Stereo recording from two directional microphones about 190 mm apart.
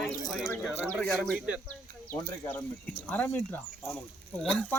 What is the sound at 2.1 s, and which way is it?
Speech, 10° left (ahead or behind).